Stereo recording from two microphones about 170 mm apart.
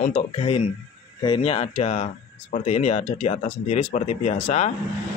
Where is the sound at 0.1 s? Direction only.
35° left (ahead or behind).